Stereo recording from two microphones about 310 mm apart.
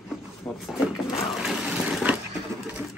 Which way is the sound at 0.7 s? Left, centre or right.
Centre.